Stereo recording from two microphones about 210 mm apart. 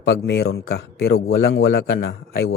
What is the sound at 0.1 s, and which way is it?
Speech, 60° left (ahead or behind).